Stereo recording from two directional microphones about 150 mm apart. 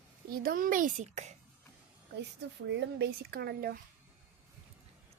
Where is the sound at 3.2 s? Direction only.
90° right.